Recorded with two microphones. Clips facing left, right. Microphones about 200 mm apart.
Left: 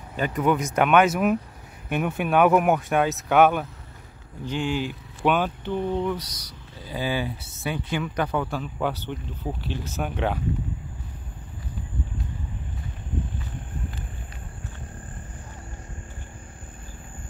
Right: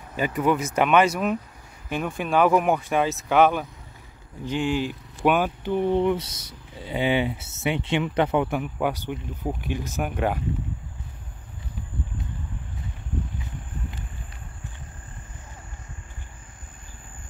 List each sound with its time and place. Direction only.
0.1 s speech: 10° right (ahead or behind)
5.9 s speech: 25° right (ahead or behind); by 10.4 s 5° right (ahead or behind)